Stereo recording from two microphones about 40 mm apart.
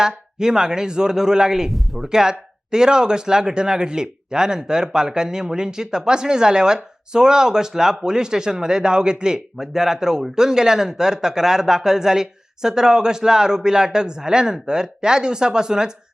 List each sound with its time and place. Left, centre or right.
0.0 s speech: centre
2.0 s speech: centre